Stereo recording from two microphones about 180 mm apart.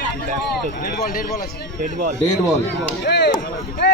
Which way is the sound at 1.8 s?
50° right (ahead or behind).